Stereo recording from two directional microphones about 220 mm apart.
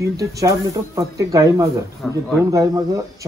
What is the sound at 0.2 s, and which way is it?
Speech, 15° right (ahead or behind).